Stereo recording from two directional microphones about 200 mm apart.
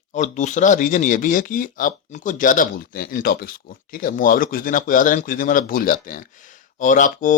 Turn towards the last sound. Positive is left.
turn(degrees=40)  # may be behind; listen again after turning